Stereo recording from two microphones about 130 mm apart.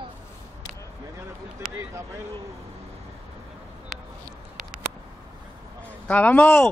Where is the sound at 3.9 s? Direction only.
Centre (ahead or behind).